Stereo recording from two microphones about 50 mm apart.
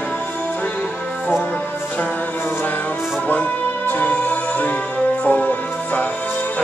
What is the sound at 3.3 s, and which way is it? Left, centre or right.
Music, left.